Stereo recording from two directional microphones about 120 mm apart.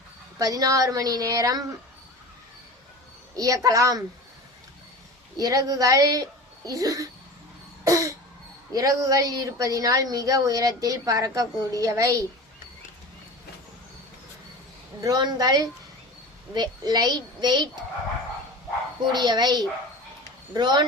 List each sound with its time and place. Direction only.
0.3 s a woman's voice: 30° right (ahead or behind)
3.3 s a woman's voice: 30° right (ahead or behind)
5.4 s a child's voice: 30° right (ahead or behind)
7.9 s cough: 25° right (ahead or behind)
8.7 s a woman's voice: 30° right (ahead or behind)
15.0 s a child's voice: 35° right (ahead or behind)
19.1 s a child's voice: 35° right (ahead or behind)